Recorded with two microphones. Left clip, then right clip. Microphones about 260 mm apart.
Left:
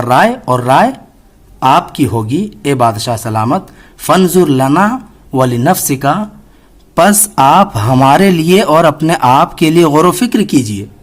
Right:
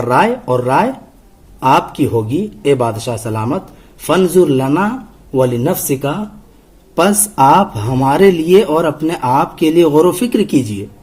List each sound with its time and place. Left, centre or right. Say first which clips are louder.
0.1 s a man's voice: left 3 dB; left
7.3 s a man's voice: left 1 dB; left